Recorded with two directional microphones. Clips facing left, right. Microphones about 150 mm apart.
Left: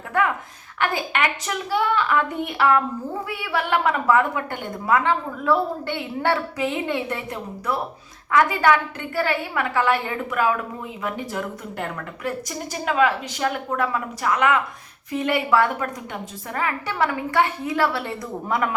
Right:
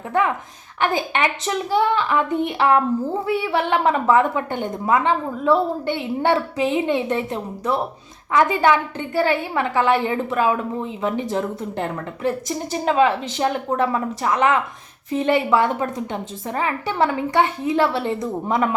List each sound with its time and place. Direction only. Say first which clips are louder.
0.8 s a woman's voice: right 3 dB; 20° right (ahead or behind)